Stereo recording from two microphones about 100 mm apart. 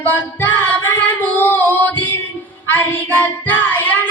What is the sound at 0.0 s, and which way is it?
Female singing, 20° left (ahead or behind).